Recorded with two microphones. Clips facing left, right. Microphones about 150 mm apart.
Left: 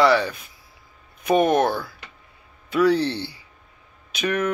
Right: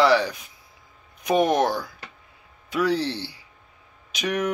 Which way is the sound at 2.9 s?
60° left (ahead or behind).